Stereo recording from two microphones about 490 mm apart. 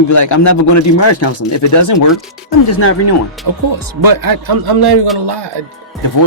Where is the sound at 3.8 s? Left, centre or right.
Right.